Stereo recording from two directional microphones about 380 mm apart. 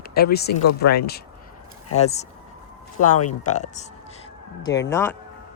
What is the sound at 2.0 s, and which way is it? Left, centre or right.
Speech, centre.